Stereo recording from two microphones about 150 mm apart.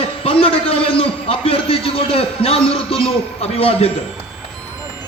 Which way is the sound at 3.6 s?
40° left (ahead or behind).